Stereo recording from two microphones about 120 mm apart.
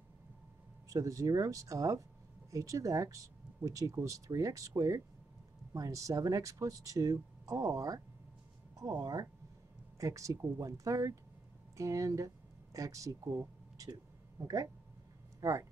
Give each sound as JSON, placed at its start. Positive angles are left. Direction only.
{"t": 0.8, "sound": "speech", "side_deg": -25}
{"t": 15.4, "sound": "speech", "side_deg": -25}